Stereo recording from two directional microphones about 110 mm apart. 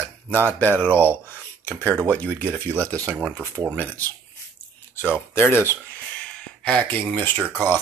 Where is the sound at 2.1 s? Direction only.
15° left (ahead or behind).